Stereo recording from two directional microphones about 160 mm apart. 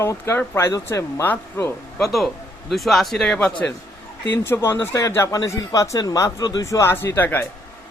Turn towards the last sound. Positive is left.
turn(degrees=10)  # may be behind; listen again after turning